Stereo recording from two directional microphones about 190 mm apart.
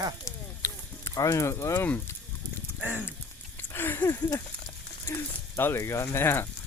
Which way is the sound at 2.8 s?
10° right (ahead or behind).